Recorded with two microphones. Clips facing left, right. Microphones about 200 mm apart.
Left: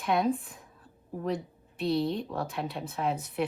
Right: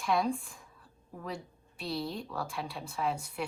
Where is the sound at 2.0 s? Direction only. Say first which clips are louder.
Left 7 dB; centre (ahead or behind).